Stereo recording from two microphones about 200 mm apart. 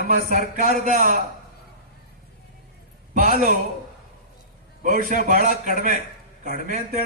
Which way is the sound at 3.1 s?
40° right (ahead or behind).